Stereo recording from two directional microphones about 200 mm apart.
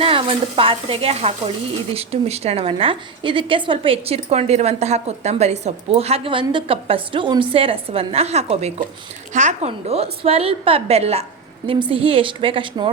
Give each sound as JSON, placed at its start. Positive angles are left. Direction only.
{"t": 0.0, "sound": "a woman's voice", "side_deg": -25}